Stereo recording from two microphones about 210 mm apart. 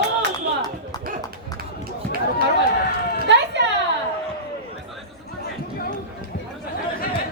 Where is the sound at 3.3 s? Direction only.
55° right (ahead or behind).